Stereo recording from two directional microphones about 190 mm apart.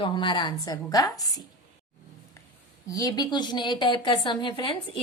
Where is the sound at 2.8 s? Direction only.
20° left (ahead or behind).